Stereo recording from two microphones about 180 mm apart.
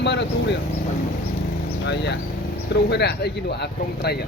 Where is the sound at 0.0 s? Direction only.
70° left (ahead or behind).